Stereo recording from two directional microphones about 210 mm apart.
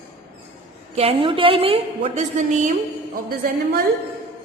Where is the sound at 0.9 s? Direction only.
30° right (ahead or behind).